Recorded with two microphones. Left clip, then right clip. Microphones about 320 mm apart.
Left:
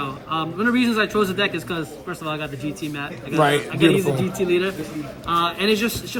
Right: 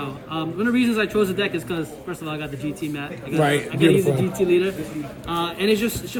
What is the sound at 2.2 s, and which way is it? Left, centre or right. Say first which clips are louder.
Speech: left 4 dB; right.